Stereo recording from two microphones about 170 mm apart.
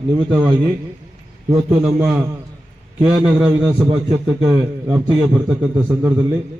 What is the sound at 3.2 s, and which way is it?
A man's voice, 5° right (ahead or behind).